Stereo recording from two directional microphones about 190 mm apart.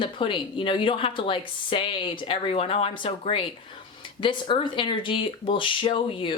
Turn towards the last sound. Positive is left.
turn(degrees=25)  # may be behind; listen again after turning